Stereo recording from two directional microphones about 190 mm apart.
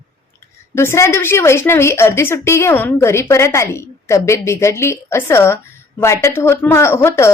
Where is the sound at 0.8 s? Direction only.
15° left (ahead or behind).